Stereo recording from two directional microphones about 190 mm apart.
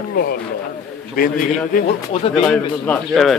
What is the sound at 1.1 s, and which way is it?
Speech, 45° left (ahead or behind).